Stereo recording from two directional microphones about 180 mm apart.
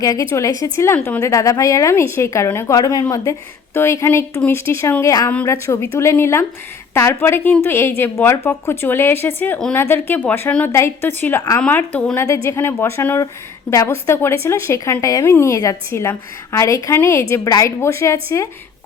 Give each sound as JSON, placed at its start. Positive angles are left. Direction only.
{"t": 0.0, "sound": "a woman's voice", "side_deg": 20}